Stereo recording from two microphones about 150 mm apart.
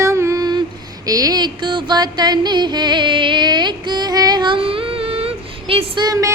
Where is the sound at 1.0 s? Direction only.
25° right (ahead or behind).